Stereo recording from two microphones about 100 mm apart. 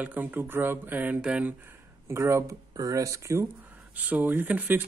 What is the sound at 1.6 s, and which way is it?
Speech, 25° right (ahead or behind).